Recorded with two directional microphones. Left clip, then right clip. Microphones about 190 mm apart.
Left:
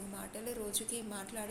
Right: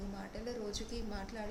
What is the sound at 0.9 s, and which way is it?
Speech, 10° right (ahead or behind).